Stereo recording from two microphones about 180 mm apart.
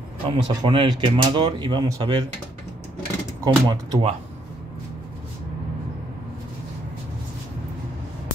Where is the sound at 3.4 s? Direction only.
25° right (ahead or behind).